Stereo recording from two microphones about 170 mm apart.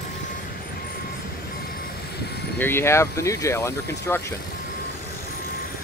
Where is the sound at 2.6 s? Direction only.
15° left (ahead or behind).